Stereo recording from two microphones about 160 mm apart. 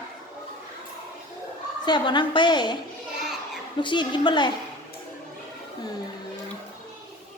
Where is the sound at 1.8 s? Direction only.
30° left (ahead or behind).